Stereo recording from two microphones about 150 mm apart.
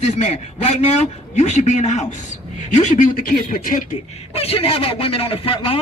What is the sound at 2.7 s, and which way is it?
Speech, 60° left (ahead or behind).